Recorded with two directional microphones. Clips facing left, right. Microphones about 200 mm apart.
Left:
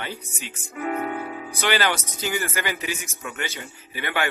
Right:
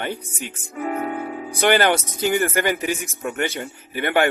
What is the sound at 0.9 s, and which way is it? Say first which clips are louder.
Music: right 2 dB; 35° right (ahead or behind).